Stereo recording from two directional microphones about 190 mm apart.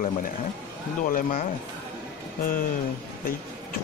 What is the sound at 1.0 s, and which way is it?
Speech, 45° left (ahead or behind).